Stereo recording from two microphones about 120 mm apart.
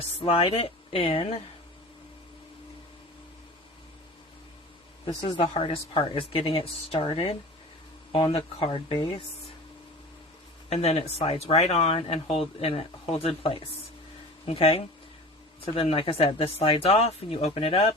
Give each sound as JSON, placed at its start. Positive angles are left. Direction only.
{"t": 0.0, "sound": "speech", "side_deg": 50}
{"t": 5.0, "sound": "speech", "side_deg": 40}
{"t": 10.7, "sound": "speech", "side_deg": 60}